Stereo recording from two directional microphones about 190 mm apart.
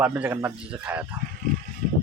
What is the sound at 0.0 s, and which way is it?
Speech, 10° right (ahead or behind).